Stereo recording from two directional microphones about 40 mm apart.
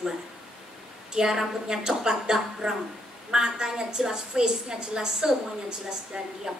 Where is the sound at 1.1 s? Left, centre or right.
Centre.